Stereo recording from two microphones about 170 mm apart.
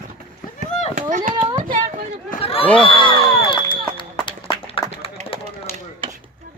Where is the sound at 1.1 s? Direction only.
50° right (ahead or behind).